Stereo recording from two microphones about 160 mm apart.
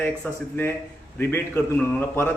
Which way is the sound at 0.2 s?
10° left (ahead or behind).